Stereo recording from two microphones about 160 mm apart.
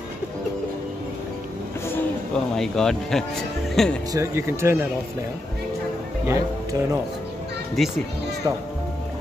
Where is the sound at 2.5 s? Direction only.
5° left (ahead or behind).